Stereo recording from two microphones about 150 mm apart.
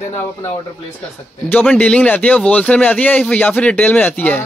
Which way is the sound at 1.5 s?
10° left (ahead or behind).